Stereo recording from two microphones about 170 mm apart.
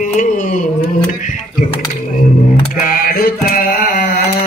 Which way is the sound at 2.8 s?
55° left (ahead or behind).